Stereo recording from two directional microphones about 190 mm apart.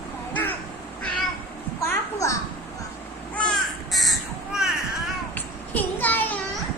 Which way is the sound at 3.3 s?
5° left (ahead or behind).